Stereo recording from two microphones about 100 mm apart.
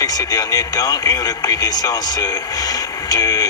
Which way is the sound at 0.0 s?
40° left (ahead or behind).